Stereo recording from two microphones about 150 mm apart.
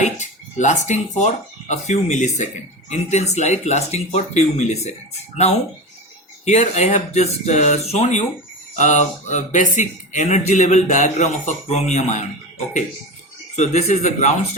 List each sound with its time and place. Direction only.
0.0 s speech: 50° left (ahead or behind)